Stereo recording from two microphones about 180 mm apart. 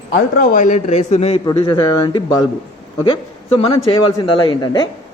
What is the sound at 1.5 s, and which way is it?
A man's voice, 25° left (ahead or behind).